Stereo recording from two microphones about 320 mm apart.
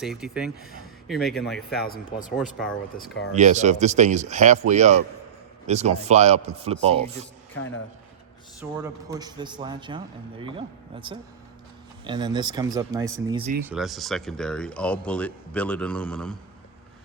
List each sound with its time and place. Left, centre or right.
0.0 s speech: centre
1.8 s speech: left
3.3 s speech: right
8.7 s a man's voice: centre